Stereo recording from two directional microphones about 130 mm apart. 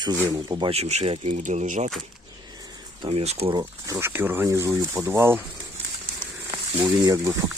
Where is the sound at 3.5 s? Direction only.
20° right (ahead or behind).